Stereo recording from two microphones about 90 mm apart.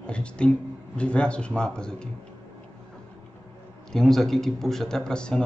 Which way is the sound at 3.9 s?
5° left (ahead or behind).